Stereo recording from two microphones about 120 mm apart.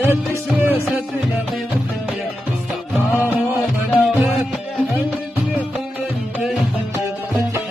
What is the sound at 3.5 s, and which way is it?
Music, 15° right (ahead or behind).